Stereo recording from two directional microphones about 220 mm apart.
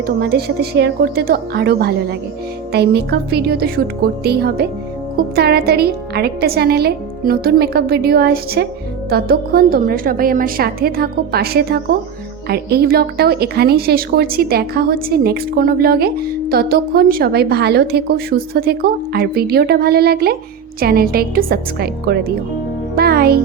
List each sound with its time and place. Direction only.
0.2 s a child's voice: 45° right (ahead or behind)